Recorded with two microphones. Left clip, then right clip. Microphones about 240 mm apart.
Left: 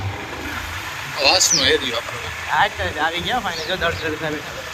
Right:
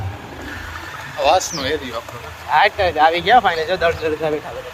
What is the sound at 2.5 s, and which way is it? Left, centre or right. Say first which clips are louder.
Speech: right 5 dB; right.